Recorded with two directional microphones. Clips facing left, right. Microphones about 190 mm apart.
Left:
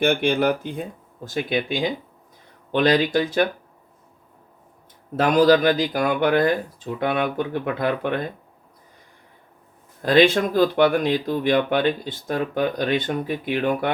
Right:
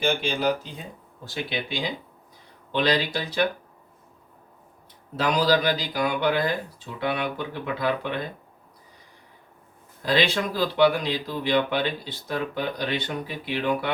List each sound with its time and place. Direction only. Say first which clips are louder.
0.0 s speech: left 5 dB; 60° left (ahead or behind)
5.1 s speech: left 6 dB; 50° left (ahead or behind)
10.0 s speech: left 7 dB; 50° left (ahead or behind)